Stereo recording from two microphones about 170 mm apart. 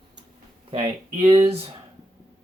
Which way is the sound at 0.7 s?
35° right (ahead or behind).